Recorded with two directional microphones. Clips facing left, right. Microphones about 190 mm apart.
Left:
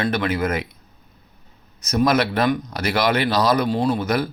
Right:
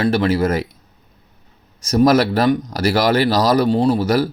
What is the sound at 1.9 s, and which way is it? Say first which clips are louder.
Speech: right 5 dB; 40° right (ahead or behind).